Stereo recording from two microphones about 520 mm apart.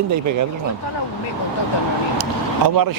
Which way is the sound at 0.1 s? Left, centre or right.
Right.